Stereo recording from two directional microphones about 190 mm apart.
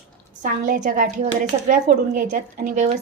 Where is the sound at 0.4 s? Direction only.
45° right (ahead or behind).